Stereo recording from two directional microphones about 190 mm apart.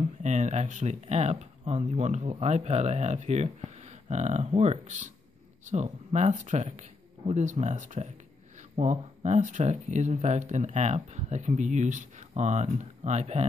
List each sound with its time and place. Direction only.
0.2 s speech: 40° right (ahead or behind)